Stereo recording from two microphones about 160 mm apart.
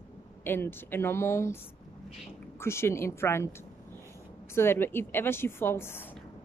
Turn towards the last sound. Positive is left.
turn(degrees=15)  # may be behind; listen again after turning